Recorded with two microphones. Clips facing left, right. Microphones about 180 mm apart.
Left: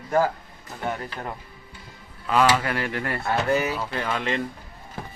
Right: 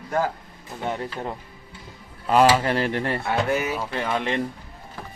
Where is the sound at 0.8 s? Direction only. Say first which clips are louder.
Right 2 dB; 20° right (ahead or behind).